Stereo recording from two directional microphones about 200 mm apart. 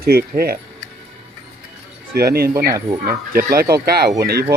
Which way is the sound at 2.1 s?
50° right (ahead or behind).